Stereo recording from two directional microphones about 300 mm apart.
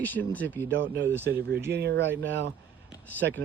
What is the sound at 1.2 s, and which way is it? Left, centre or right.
Speech, right.